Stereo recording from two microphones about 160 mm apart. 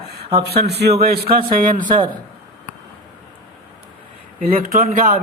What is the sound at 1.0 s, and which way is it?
Speech, 75° right (ahead or behind).